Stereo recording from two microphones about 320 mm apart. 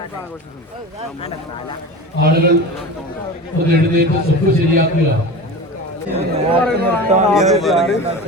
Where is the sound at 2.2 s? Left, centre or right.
Right.